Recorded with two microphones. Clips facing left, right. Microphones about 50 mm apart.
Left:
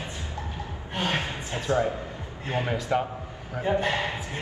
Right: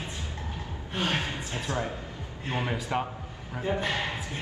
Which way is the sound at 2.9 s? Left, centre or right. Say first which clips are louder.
Left 5 dB; centre.